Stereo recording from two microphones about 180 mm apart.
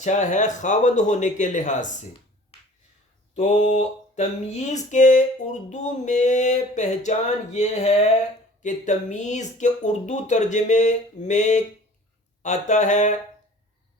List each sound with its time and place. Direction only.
0.0 s speech: 40° left (ahead or behind)
3.3 s a sound: 40° left (ahead or behind)
12.4 s speech: 40° left (ahead or behind)